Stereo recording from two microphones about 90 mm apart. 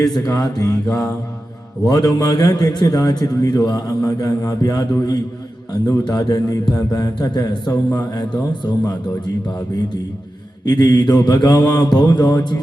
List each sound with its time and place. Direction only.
0.0 s a man's voice: 45° left (ahead or behind)
10.7 s a man's voice: 50° left (ahead or behind)